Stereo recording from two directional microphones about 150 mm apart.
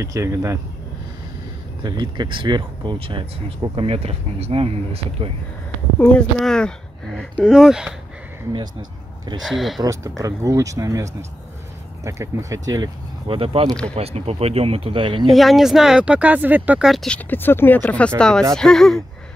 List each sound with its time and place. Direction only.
0.0 s speech: 20° right (ahead or behind)
1.8 s speech: 30° right (ahead or behind)
5.9 s speech: 5° left (ahead or behind)
9.4 s speech: centre (ahead or behind)
9.8 s speech: 20° right (ahead or behind)
15.2 s speech: centre (ahead or behind)
17.3 s speech: 15° left (ahead or behind)